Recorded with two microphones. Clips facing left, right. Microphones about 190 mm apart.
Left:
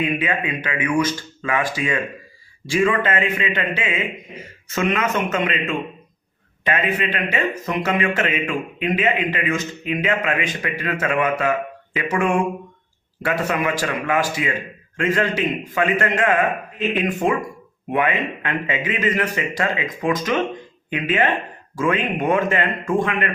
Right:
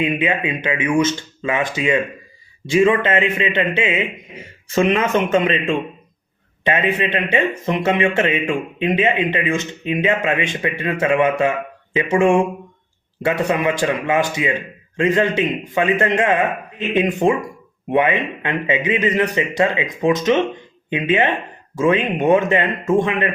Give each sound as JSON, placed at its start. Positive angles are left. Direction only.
{"t": 0.0, "sound": "speech", "side_deg": -25}